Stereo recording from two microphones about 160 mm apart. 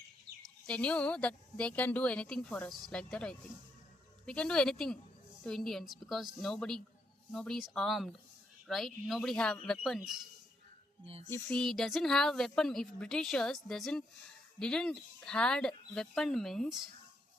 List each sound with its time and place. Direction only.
0.4 s a woman's voice: 5° left (ahead or behind)
11.0 s music: 40° right (ahead or behind)
11.4 s a woman's voice: 5° left (ahead or behind)